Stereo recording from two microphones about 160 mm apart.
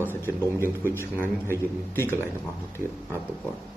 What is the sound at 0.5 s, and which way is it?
Speech, 15° right (ahead or behind).